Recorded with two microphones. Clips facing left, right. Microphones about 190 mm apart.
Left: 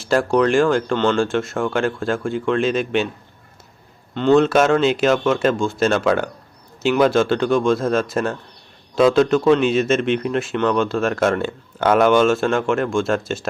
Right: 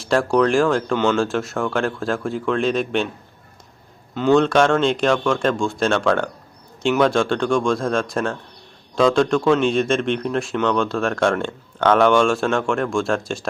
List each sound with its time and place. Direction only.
0.0 s speech: centre (ahead or behind)
4.1 s speech: centre (ahead or behind)